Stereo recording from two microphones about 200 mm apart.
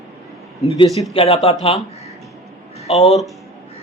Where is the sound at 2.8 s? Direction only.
30° left (ahead or behind).